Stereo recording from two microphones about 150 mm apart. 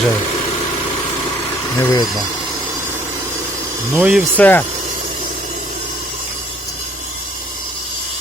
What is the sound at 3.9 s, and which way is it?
Speech, 15° right (ahead or behind).